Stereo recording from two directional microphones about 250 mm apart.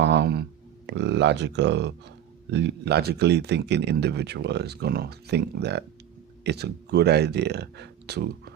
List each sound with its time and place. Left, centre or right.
0.0 s speech: right